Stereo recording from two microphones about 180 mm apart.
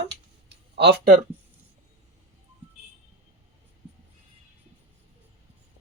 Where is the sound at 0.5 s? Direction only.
70° right (ahead or behind).